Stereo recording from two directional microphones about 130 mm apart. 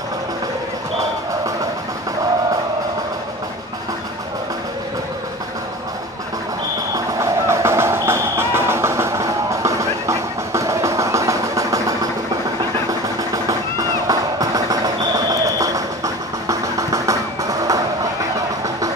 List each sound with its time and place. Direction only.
6.9 s music: 25° right (ahead or behind)
13.3 s music: 25° right (ahead or behind)